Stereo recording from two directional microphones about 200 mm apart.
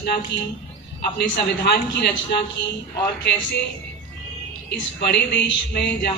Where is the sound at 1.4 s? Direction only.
55° left (ahead or behind).